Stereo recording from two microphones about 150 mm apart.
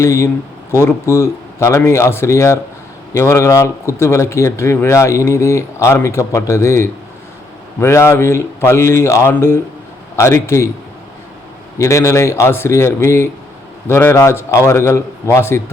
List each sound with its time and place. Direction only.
0.0 s a man's voice: 20° left (ahead or behind)
11.8 s a man's voice: 20° left (ahead or behind)